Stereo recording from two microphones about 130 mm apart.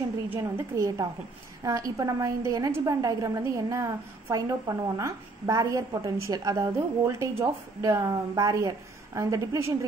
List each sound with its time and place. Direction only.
0.3 s a woman's voice: 25° right (ahead or behind)